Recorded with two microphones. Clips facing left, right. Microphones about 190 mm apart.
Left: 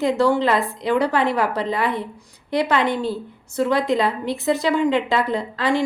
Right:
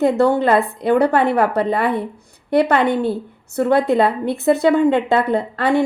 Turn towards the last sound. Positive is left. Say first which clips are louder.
# right 4 dB
turn(degrees=-60)  # may be behind; listen again after turning